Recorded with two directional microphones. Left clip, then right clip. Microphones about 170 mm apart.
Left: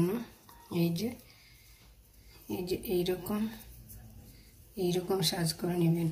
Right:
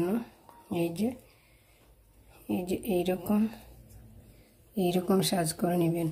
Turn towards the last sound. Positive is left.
turn(degrees=-60)  # may be behind; listen again after turning